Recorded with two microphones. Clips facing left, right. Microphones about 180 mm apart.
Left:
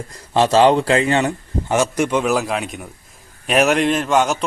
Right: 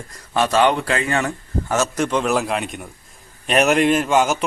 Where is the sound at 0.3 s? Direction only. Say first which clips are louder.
Left 4 dB; 30° left (ahead or behind).